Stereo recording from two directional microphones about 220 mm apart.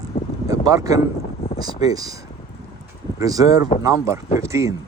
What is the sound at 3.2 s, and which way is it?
Speech, 15° right (ahead or behind).